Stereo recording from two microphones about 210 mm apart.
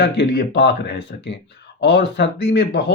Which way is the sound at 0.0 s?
50° left (ahead or behind).